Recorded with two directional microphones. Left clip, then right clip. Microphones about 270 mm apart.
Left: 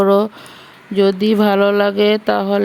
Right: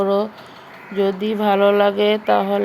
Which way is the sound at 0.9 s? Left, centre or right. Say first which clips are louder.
Left 6 dB; left.